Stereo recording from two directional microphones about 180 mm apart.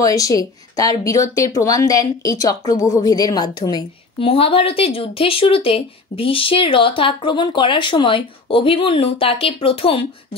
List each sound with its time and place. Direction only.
0.0 s speech: 20° left (ahead or behind)